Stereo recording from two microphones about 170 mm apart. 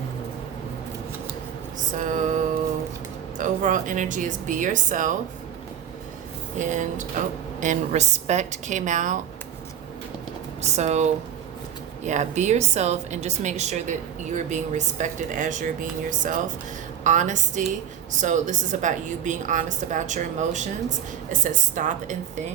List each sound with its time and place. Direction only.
2.0 s mantra: 50° right (ahead or behind)
3.3 s a woman's voice: 50° right (ahead or behind)
6.6 s a woman's voice: 45° right (ahead or behind)
10.6 s a woman's voice: 40° right (ahead or behind)